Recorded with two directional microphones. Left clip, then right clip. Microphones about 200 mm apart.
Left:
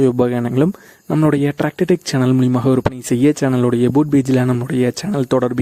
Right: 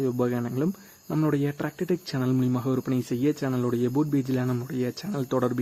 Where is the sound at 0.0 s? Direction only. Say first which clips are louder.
Left 11 dB; 50° left (ahead or behind).